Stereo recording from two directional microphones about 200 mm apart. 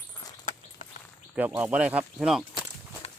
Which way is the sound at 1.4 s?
10° right (ahead or behind).